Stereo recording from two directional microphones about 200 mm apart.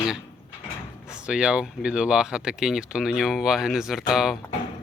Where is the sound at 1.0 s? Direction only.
5° right (ahead or behind).